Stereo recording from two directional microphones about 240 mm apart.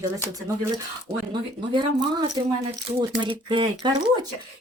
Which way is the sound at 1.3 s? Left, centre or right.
Centre.